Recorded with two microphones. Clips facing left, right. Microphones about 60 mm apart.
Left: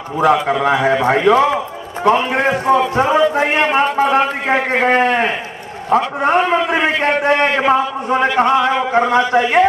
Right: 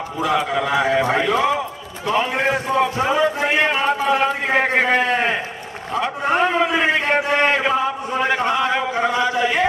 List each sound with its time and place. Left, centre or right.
0.2 s a man's voice: left